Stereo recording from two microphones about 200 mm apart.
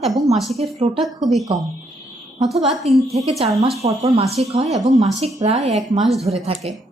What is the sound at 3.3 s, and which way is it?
A woman's voice, 30° right (ahead or behind).